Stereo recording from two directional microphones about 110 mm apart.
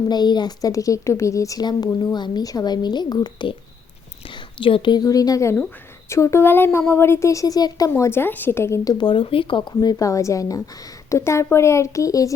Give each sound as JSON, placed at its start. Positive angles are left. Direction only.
{"t": 0.1, "sound": "a woman's voice", "side_deg": 40}
{"t": 9.2, "sound": "speech", "side_deg": 55}
{"t": 10.0, "sound": "a woman's voice", "side_deg": 30}